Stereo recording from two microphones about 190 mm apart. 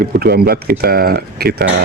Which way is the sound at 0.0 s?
55° right (ahead or behind).